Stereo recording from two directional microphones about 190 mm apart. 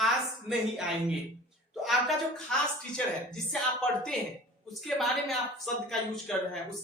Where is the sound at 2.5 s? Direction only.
5° left (ahead or behind).